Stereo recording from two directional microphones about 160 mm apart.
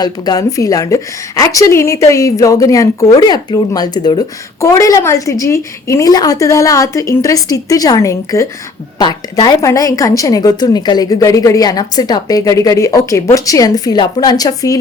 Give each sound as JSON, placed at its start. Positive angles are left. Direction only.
{"t": 0.0, "sound": "a woman's voice", "side_deg": 25}